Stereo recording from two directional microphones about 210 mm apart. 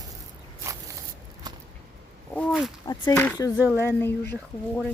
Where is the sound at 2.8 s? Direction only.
20° left (ahead or behind).